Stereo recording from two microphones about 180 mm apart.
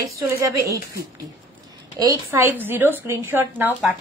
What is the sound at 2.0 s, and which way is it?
A woman's voice, 10° right (ahead or behind).